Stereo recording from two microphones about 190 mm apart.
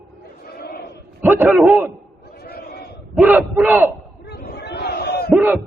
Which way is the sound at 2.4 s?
55° left (ahead or behind).